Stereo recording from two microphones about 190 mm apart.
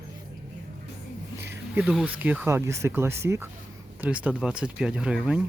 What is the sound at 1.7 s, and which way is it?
Speech, 5° right (ahead or behind).